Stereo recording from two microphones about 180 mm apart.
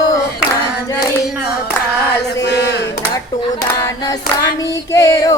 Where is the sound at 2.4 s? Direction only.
70° left (ahead or behind).